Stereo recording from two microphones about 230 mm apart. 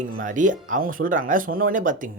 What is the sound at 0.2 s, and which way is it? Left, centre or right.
Speech, right.